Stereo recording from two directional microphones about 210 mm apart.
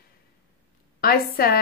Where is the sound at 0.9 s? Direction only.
45° left (ahead or behind).